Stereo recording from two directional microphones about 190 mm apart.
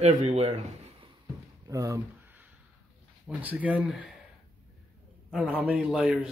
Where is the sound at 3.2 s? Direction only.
10° right (ahead or behind).